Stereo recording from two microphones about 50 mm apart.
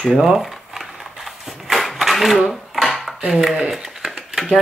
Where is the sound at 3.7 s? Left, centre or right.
Centre.